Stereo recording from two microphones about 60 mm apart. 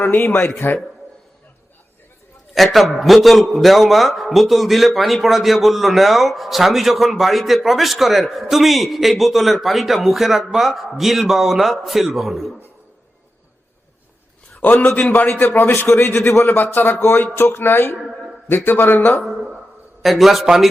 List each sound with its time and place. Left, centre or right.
0.0 s speech: left
2.7 s a man's voice: centre
14.6 s a man's voice: left
15.7 s speech: left
17.0 s speech: left
19.2 s a sound: centre
20.0 s a man's voice: centre